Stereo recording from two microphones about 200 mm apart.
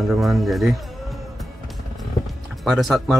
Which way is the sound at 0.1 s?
Centre (ahead or behind).